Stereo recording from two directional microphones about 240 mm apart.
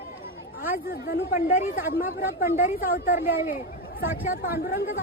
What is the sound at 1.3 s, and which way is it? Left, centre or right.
Speech, left.